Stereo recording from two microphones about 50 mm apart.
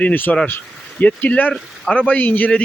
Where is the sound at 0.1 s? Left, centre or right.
Left.